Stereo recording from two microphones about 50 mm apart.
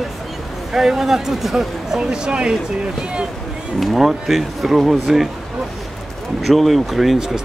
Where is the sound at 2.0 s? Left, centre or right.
Centre.